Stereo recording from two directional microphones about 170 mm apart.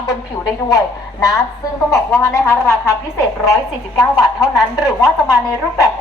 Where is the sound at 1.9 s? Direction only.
20° left (ahead or behind).